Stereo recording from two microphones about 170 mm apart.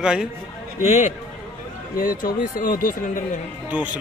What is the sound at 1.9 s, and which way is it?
Speech, 55° left (ahead or behind).